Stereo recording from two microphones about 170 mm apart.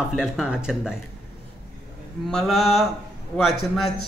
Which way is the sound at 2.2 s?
Centre (ahead or behind).